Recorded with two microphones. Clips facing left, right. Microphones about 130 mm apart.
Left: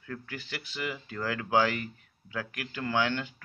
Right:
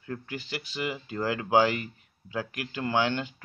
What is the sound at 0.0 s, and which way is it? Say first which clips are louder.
Speech: right 4 dB; 25° right (ahead or behind).